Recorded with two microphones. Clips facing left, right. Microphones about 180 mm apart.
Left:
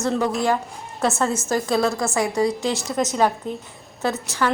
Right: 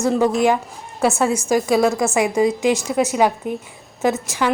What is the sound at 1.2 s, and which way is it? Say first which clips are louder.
A woman's voice: right 4 dB; 15° right (ahead or behind).